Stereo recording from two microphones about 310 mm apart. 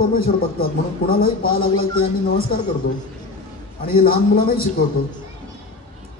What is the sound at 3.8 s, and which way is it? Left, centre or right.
Speech, left.